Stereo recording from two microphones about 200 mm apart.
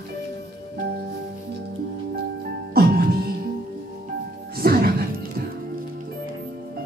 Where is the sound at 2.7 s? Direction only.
50° right (ahead or behind).